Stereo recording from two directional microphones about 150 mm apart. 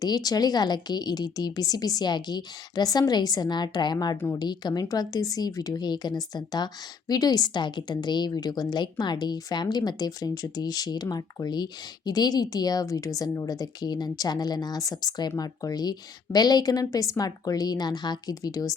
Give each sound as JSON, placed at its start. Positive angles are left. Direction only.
{"t": 0.0, "sound": "a woman's voice", "side_deg": 25}